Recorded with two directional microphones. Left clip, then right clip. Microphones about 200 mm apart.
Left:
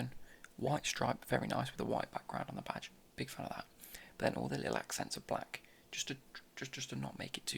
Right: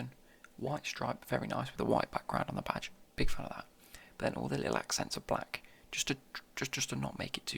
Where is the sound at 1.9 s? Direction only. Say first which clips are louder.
Right 6 dB; 15° right (ahead or behind).